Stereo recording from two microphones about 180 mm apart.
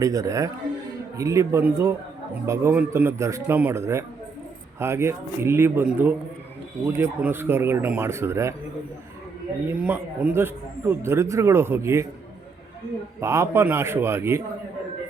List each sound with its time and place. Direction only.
0.0 s a man's voice: 20° right (ahead or behind)
9.7 s speech: 5° right (ahead or behind)
13.1 s speech: 15° right (ahead or behind)